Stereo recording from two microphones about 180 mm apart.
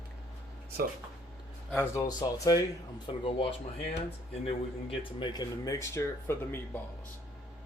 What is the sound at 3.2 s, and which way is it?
Speech, 30° left (ahead or behind).